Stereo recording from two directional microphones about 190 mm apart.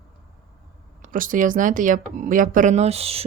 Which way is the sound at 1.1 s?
45° right (ahead or behind).